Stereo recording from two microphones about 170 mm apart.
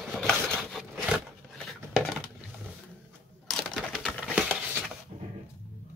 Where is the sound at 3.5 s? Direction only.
Centre (ahead or behind).